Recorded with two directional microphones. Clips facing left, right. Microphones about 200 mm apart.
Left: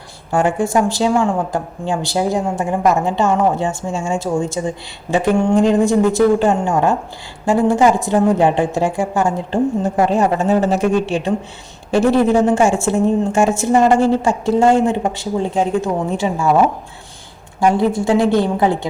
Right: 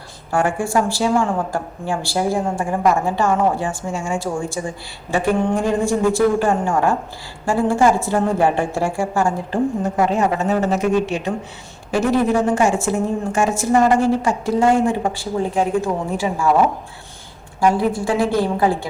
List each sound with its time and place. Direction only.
0.3 s speech: 20° left (ahead or behind)
10.0 s a woman's voice: 30° left (ahead or behind)
17.6 s speech: 25° left (ahead or behind)